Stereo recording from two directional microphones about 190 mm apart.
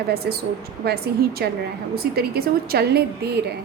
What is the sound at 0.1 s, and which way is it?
A woman's voice, 55° right (ahead or behind).